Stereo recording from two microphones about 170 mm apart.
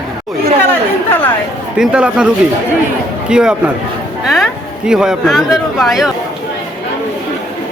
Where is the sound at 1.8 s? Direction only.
5° right (ahead or behind).